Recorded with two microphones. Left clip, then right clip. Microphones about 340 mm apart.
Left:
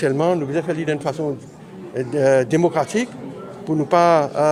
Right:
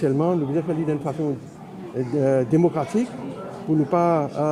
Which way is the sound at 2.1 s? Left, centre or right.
Left.